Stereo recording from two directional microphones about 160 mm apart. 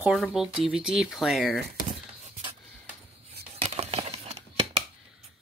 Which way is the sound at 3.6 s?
40° right (ahead or behind).